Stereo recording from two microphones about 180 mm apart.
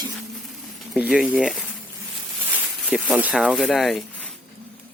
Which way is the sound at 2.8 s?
5° left (ahead or behind).